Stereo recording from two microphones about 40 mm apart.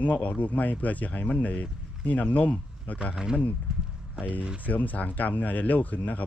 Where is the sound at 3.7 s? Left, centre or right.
Centre.